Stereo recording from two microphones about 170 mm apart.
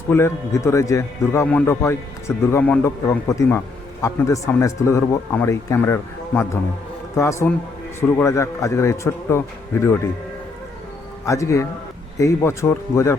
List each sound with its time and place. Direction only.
0.1 s a man's voice: 15° left (ahead or behind)
11.3 s a man's voice: 15° left (ahead or behind)